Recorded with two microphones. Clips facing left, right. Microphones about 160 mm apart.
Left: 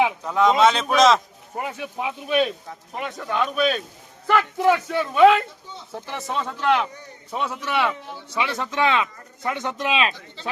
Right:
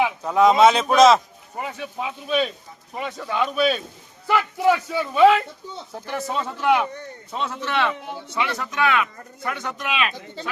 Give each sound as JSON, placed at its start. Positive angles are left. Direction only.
{"t": 0.3, "sound": "speech", "side_deg": -10}
{"t": 1.5, "sound": "speech", "side_deg": 5}
{"t": 2.0, "sound": "speech", "side_deg": 15}
{"t": 3.0, "sound": "speech", "side_deg": 0}
{"t": 7.3, "sound": "speech", "side_deg": 15}